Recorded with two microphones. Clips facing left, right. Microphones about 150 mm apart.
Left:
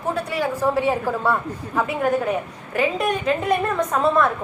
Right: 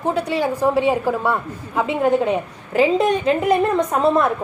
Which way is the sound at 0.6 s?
15° right (ahead or behind).